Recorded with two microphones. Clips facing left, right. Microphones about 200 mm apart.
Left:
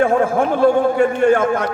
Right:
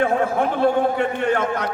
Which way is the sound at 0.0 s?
45° left (ahead or behind).